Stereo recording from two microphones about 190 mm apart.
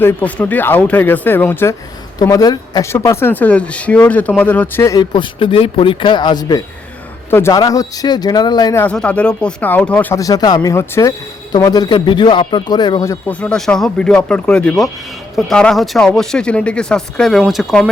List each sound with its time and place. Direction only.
0.0 s speech: 10° left (ahead or behind)
8.8 s speech: 5° left (ahead or behind)